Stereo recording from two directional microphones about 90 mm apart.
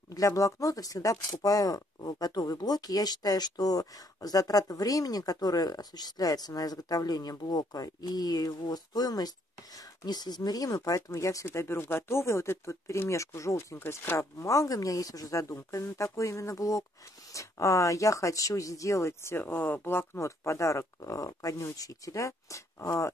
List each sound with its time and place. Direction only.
0.1 s speech: 40° left (ahead or behind)
14.5 s speech: 40° left (ahead or behind)